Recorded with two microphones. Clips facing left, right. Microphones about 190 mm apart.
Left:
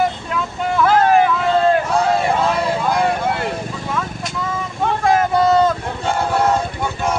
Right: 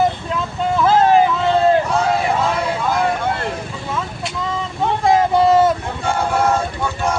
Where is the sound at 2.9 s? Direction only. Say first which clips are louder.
Right 1 dB; 5° left (ahead or behind).